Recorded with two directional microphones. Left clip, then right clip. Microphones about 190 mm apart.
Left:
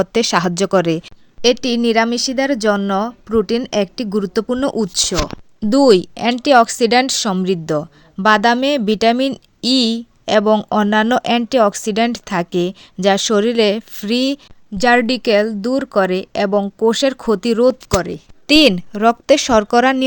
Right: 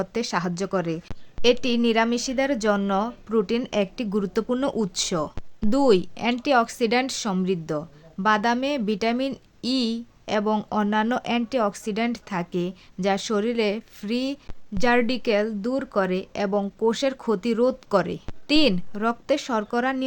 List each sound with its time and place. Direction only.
0.0 s speech: 45° left (ahead or behind)
1.4 s speech: 30° left (ahead or behind)
18.4 s speech: 45° left (ahead or behind)